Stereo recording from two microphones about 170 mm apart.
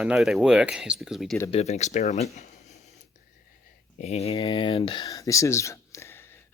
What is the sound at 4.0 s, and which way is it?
Speech, 40° left (ahead or behind).